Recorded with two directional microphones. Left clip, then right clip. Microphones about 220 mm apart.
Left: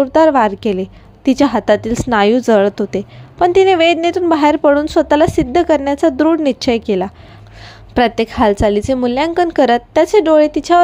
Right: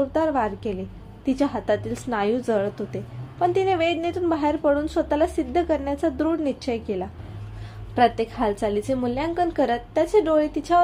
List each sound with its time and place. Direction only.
0.0 s a woman's voice: 35° left (ahead or behind)